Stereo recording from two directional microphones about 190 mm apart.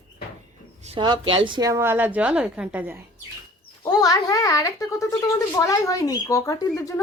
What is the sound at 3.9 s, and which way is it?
A child's voice, 20° left (ahead or behind).